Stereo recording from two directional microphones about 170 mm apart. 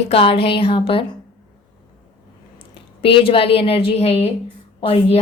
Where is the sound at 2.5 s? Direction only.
35° left (ahead or behind).